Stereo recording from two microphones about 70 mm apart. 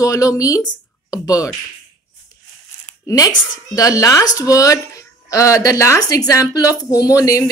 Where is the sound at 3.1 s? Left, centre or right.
Left.